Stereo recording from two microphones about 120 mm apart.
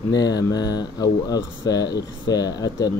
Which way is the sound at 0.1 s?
35° left (ahead or behind).